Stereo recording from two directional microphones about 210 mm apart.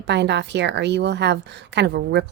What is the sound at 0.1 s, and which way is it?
A woman's voice, 55° right (ahead or behind).